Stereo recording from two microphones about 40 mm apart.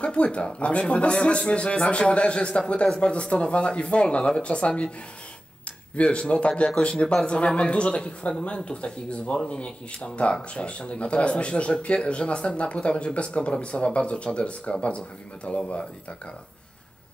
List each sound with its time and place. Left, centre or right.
0.0 s speech: left
5.9 s speech: left